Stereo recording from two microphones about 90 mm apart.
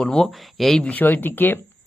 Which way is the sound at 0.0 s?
5° left (ahead or behind).